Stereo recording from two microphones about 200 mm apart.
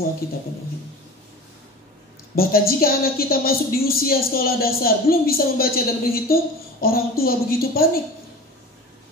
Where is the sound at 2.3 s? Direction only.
50° left (ahead or behind).